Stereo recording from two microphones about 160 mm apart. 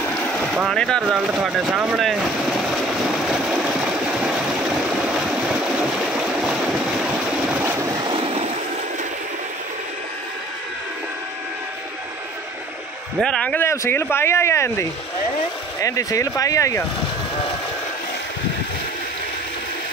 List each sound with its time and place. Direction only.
0.3 s speech: 5° left (ahead or behind)
3.1 s a sound: 5° right (ahead or behind)
4.8 s stream: 5° right (ahead or behind)
7.5 s vehicle: 15° right (ahead or behind); by 8.5 s 35° right (ahead or behind)
13.2 s speech: 5° left (ahead or behind)